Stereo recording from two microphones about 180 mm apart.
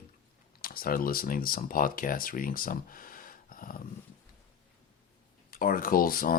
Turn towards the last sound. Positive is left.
turn(degrees=55)  # may be behind; listen again after turning